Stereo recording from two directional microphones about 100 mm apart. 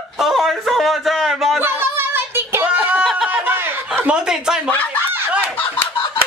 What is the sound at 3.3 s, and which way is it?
Chuckle, 20° right (ahead or behind).